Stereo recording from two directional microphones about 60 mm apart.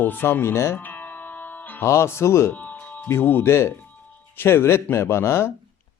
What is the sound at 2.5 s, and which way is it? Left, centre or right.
Music, left.